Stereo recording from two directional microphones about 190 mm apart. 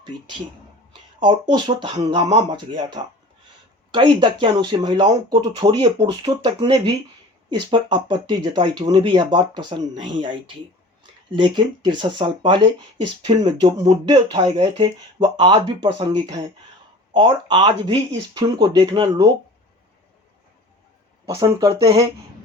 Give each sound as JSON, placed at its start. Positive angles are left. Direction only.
{"t": 1.2, "sound": "speech", "side_deg": -25}
{"t": 3.9, "sound": "speech", "side_deg": -25}
{"t": 21.3, "sound": "speech", "side_deg": -20}